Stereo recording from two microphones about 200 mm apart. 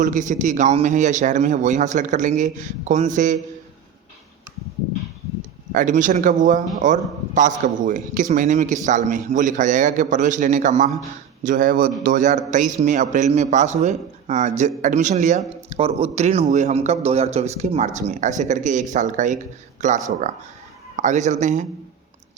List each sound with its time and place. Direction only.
0.0 s a man's voice: 40° right (ahead or behind)
5.7 s a man's voice: 40° right (ahead or behind)